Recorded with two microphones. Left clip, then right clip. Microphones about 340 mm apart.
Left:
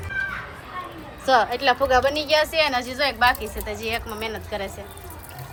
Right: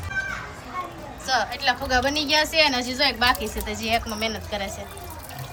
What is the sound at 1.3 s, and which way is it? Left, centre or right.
A woman's voice, centre.